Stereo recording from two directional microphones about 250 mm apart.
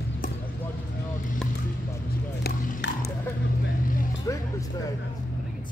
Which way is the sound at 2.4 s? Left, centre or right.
Left.